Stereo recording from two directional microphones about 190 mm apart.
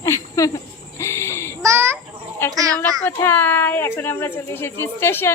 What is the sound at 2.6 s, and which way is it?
Speech, 20° right (ahead or behind).